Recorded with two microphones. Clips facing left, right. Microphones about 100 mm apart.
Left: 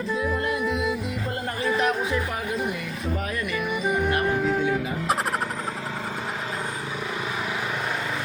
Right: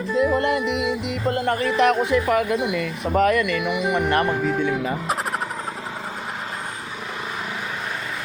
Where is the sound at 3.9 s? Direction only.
70° right (ahead or behind).